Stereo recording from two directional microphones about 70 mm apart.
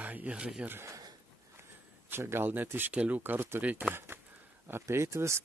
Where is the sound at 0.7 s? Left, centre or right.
Right.